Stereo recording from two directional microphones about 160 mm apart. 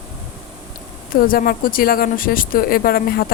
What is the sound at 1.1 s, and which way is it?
Speech, 65° left (ahead or behind).